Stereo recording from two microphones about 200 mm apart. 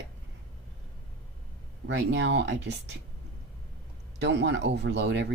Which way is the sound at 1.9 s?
60° right (ahead or behind).